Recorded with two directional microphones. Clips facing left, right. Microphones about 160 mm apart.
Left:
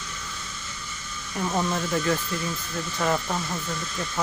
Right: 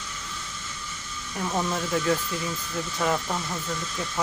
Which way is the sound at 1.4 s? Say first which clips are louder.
Left 1 dB; 5° left (ahead or behind).